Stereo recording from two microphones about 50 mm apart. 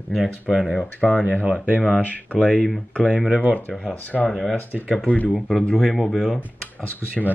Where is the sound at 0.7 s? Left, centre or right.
Left.